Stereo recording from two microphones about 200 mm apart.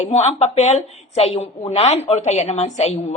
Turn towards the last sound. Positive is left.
turn(degrees=30)  # may be behind; listen again after turning